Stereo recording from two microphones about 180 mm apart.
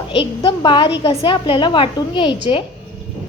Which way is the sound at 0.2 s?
25° left (ahead or behind).